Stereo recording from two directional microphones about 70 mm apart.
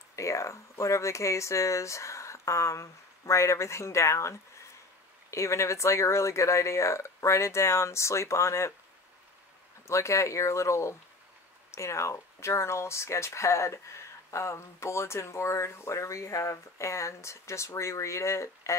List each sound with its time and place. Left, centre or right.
0.1 s speech: left
9.8 s speech: left